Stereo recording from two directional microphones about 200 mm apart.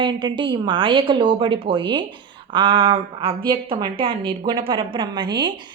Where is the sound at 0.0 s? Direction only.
25° right (ahead or behind).